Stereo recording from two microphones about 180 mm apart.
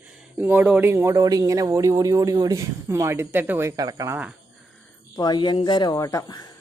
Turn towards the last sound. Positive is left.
turn(degrees=20)  # may be behind; listen again after turning